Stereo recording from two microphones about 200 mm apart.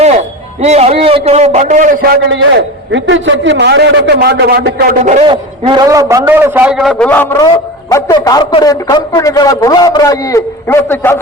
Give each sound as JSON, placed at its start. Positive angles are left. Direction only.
{"t": 0.0, "sound": "a man's voice", "side_deg": -35}
{"t": 2.3, "sound": "a man's voice", "side_deg": -65}
{"t": 5.2, "sound": "a man's voice", "side_deg": -25}